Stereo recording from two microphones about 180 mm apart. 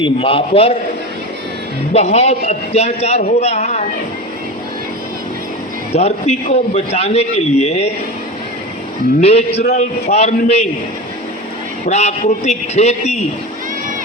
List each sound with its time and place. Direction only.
0.0 s a man's voice: 30° left (ahead or behind)
1.9 s a man's voice: 35° left (ahead or behind)
5.9 s a man's voice: 35° left (ahead or behind)
9.2 s a man's voice: 35° left (ahead or behind)
11.9 s a man's voice: 40° left (ahead or behind)